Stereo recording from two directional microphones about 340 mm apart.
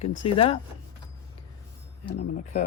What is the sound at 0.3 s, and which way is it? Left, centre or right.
Speech, centre.